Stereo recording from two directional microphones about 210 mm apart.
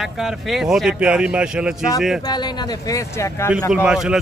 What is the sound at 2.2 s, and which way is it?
Speech, 20° left (ahead or behind).